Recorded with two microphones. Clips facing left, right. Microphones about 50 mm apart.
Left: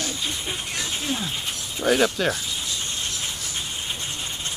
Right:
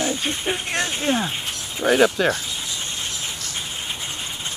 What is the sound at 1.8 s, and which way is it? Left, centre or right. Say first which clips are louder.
Speech: right 4 dB; centre.